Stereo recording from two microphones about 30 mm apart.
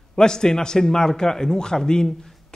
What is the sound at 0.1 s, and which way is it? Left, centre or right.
A man's voice, left.